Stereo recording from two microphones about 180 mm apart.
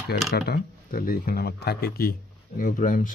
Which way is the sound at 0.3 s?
60° left (ahead or behind).